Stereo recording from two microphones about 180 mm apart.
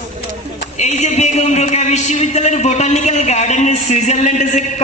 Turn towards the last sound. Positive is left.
turn(degrees=45)  # may be behind; listen again after turning